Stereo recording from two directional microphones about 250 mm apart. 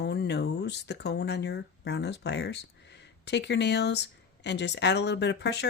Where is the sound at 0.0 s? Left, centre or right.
Left.